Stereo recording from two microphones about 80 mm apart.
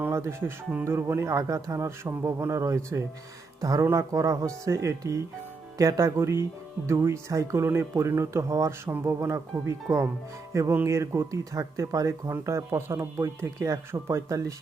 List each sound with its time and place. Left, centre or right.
0.1 s a man's voice: right
8.8 s a man's voice: right